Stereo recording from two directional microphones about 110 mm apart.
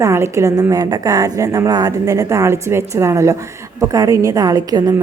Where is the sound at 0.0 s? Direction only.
25° right (ahead or behind).